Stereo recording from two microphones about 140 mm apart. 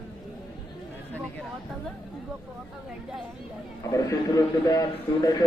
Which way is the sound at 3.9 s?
25° left (ahead or behind).